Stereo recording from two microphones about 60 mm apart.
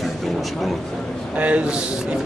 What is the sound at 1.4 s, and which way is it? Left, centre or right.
Speech, right.